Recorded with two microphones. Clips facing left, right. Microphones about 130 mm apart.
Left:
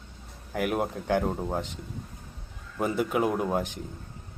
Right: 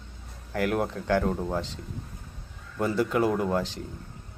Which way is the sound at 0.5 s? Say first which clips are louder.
Right 1 dB; 20° left (ahead or behind).